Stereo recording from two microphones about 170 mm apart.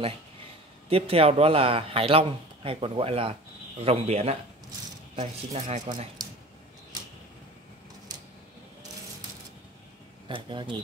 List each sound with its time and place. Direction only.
0.8 s speech: 35° right (ahead or behind)
10.2 s speech: 30° right (ahead or behind)